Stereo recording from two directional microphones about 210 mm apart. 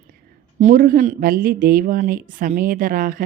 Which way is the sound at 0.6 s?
40° right (ahead or behind).